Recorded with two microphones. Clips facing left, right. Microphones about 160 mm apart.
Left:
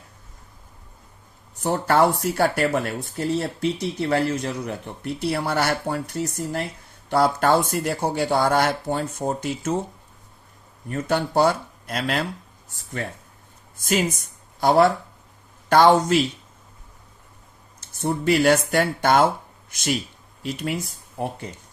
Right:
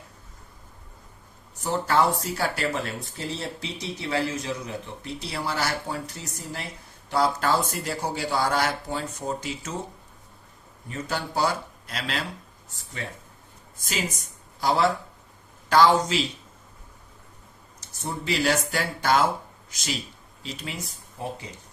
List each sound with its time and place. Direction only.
1.6 s speech: 60° left (ahead or behind)
10.8 s speech: 55° left (ahead or behind)
14.6 s speech: 55° left (ahead or behind)
18.0 s speech: 60° left (ahead or behind)